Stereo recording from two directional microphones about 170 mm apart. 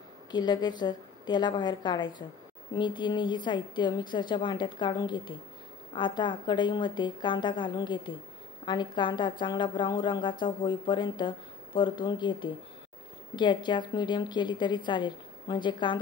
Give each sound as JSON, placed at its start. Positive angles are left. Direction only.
{"t": 0.3, "sound": "a woman's voice", "side_deg": 25}